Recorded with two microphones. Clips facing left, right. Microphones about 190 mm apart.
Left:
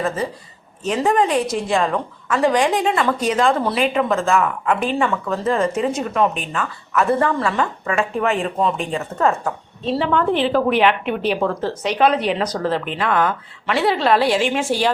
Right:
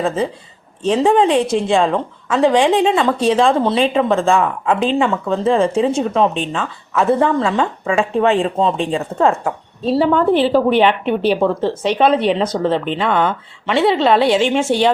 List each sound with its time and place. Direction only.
0.9 s a woman's voice: 30° right (ahead or behind)
12.7 s a woman's voice: 5° left (ahead or behind)
13.0 s a woman's voice: 25° right (ahead or behind)
13.8 s a woman's voice: centre (ahead or behind)